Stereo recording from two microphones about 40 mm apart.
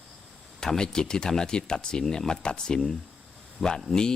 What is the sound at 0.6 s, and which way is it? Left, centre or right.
Speech, centre.